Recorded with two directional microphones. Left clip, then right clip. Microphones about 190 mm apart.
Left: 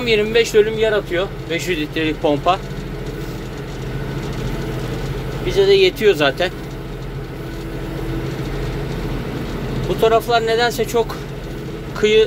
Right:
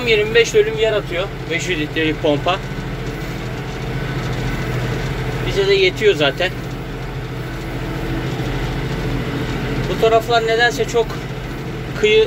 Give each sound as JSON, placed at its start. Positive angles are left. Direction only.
{"t": 0.0, "sound": "speech", "side_deg": 20}
{"t": 5.7, "sound": "speech", "side_deg": 25}
{"t": 10.0, "sound": "speech", "side_deg": 30}